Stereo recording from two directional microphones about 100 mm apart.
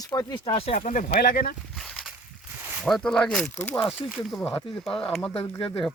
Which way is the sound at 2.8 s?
5° left (ahead or behind).